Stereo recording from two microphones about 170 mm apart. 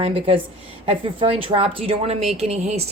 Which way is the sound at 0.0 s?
35° right (ahead or behind).